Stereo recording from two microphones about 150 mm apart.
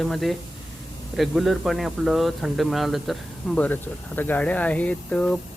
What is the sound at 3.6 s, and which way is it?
Speech, 10° left (ahead or behind).